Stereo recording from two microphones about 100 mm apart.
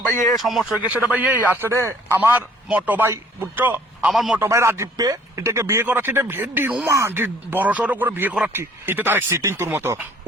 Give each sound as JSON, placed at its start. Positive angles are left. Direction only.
{"t": 0.4, "sound": "speech", "side_deg": 0}
{"t": 0.9, "sound": "a man's voice", "side_deg": -15}
{"t": 4.1, "sound": "speech", "side_deg": 0}
{"t": 4.4, "sound": "speech", "side_deg": -30}